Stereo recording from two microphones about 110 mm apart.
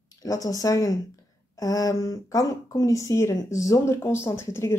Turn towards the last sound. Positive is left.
turn(degrees=25)  # may be behind; listen again after turning